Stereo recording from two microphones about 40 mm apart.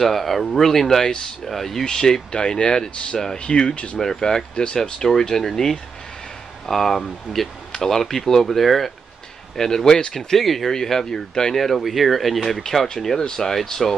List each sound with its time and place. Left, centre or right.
0.0 s speech: centre
1.9 s speech: centre
4.0 s speech: centre
10.1 s speech: centre
11.6 s speech: centre